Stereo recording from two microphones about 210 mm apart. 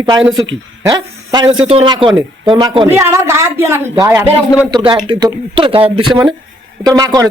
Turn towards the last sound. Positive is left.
turn(degrees=-15)  # may be behind; listen again after turning